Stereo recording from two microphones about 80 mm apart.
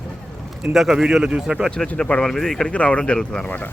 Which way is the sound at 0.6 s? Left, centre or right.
Centre.